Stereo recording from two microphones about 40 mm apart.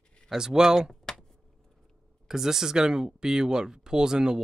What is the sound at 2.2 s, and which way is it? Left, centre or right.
Speech, centre.